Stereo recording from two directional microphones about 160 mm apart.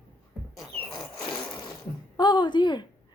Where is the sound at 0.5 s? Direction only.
Centre (ahead or behind).